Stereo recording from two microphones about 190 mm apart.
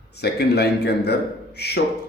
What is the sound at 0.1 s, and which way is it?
A man's voice, 60° left (ahead or behind).